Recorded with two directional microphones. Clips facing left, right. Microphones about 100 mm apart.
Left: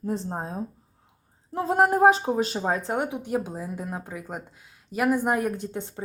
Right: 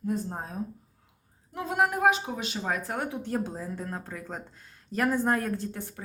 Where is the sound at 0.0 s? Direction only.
30° left (ahead or behind).